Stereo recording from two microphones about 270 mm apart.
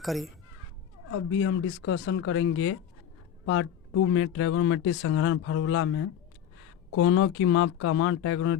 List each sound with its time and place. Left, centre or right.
0.0 s speech: centre
1.1 s speech: left